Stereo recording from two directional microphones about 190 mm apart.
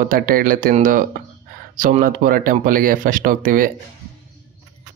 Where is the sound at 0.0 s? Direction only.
45° right (ahead or behind).